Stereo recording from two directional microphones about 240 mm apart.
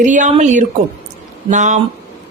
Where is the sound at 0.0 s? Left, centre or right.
Right.